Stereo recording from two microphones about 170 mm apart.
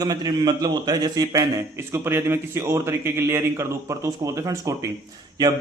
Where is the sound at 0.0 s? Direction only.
25° right (ahead or behind).